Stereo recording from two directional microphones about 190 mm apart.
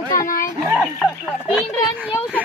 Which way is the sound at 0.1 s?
45° left (ahead or behind).